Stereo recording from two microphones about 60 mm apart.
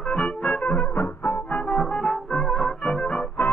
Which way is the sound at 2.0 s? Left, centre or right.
Centre.